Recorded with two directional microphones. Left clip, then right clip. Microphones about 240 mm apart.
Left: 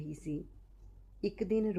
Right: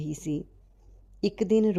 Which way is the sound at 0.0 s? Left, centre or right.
Right.